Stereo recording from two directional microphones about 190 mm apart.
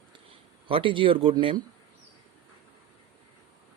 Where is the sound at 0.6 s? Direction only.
25° right (ahead or behind).